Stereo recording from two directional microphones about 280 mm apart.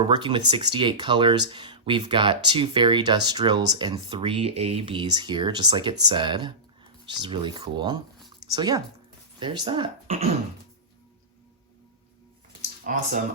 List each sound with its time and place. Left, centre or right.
0.0 s speech: centre
12.8 s speech: right